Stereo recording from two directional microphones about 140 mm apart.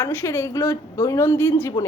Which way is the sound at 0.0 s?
15° left (ahead or behind).